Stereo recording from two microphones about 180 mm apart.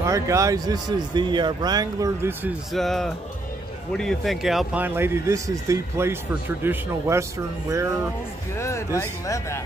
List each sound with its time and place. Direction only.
0.0 s speech: 15° right (ahead or behind)
2.7 s speech: centre (ahead or behind); by 7.9 s 15° right (ahead or behind)
8.5 s speech: 15° left (ahead or behind)